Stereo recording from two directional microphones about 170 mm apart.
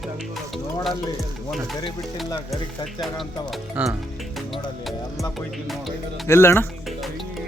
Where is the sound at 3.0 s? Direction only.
Centre (ahead or behind).